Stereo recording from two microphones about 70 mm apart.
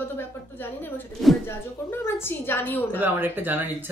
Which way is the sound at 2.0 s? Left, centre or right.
Left.